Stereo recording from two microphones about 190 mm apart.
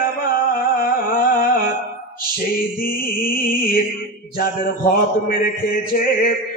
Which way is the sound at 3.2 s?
50° left (ahead or behind).